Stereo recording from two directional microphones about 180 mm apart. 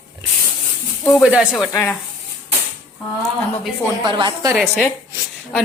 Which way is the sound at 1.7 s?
15° left (ahead or behind).